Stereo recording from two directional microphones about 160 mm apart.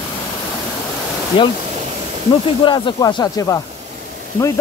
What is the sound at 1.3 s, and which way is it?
Speech, 35° left (ahead or behind).